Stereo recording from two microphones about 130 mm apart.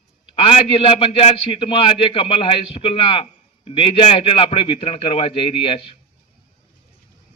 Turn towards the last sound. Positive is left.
turn(degrees=40)  # may be behind; listen again after turning